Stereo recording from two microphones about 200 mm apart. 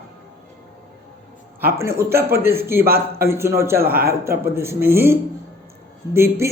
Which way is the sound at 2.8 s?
50° right (ahead or behind).